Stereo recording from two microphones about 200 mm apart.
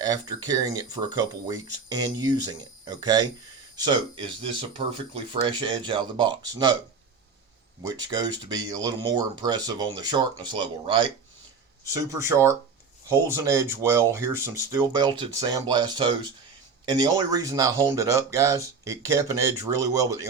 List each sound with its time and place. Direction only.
0.0 s speech: 20° right (ahead or behind)
7.8 s speech: 20° right (ahead or behind)